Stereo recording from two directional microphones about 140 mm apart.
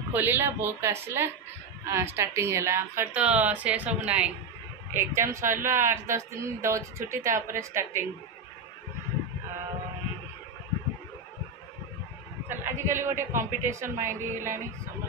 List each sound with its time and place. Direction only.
0.1 s a woman's voice: 15° right (ahead or behind)
12.4 s a sound: 15° right (ahead or behind)
13.6 s speech: 20° right (ahead or behind)